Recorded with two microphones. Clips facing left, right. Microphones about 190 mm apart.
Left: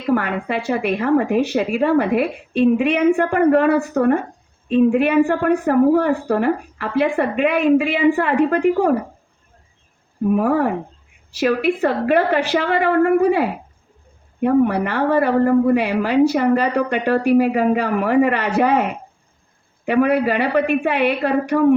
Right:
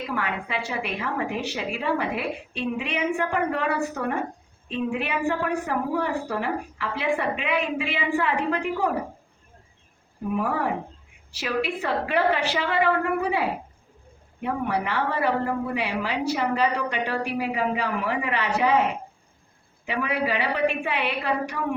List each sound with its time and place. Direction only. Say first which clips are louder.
0.1 s a woman's voice: left 13 dB; 50° left (ahead or behind)
10.2 s a woman's voice: left 9 dB; 50° left (ahead or behind)
14.4 s a woman's voice: left 11 dB; 50° left (ahead or behind)